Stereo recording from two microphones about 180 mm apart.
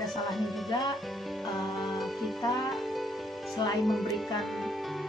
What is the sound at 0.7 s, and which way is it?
Music, 25° left (ahead or behind).